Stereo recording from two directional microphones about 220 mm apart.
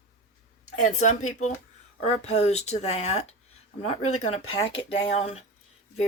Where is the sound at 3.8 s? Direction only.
75° left (ahead or behind).